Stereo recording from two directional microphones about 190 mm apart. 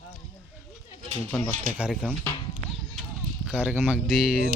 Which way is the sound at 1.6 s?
Centre (ahead or behind).